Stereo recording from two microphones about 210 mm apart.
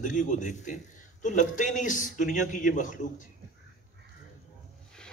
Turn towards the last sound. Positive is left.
turn(degrees=40)  # may be behind; listen again after turning